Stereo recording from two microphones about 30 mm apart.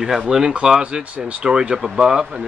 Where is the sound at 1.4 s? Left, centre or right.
Right.